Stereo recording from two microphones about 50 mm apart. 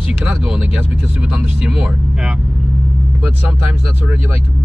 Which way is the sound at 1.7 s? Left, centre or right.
Centre.